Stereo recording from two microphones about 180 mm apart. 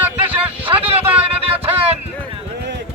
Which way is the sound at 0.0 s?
10° right (ahead or behind).